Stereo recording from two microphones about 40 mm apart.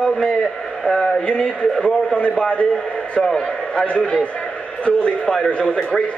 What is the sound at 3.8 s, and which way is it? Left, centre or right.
Speech, left.